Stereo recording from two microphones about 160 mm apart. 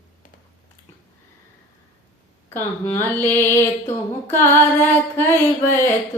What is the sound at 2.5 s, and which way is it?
Music, 10° left (ahead or behind).